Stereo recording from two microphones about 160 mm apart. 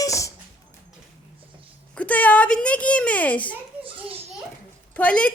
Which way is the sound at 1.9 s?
10° left (ahead or behind).